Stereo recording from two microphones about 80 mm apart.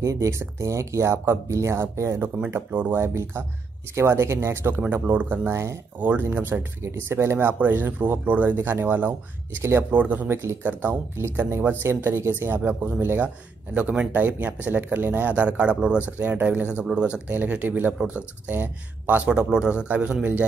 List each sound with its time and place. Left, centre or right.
0.0 s speech: right
2.2 s speech: centre
4.8 s speech: right
5.5 s speech: right
5.9 s speech: right
10.3 s speech: right; by 20.2 s centre